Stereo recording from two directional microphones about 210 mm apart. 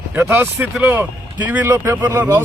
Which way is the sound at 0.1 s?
10° right (ahead or behind).